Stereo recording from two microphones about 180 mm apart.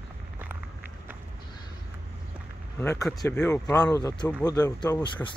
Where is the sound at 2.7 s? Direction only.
15° left (ahead or behind).